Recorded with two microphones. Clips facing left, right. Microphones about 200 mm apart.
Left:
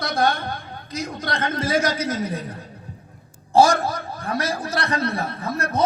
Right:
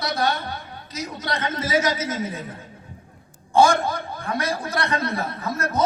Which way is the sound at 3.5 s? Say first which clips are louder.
Left 1 dB; 35° left (ahead or behind).